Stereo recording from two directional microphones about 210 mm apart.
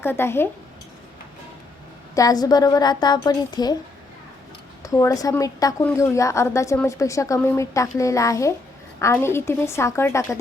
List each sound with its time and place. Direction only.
0.0 s a woman's voice: 10° left (ahead or behind)
2.1 s a woman's voice: 15° left (ahead or behind)
4.8 s a woman's voice: 15° left (ahead or behind)